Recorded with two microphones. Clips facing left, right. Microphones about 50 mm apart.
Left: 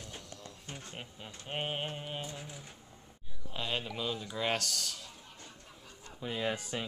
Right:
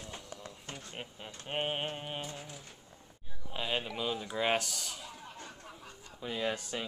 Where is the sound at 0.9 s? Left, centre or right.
Centre.